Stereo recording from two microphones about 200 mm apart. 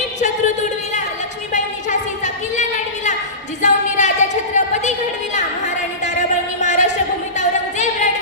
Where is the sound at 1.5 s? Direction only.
35° left (ahead or behind).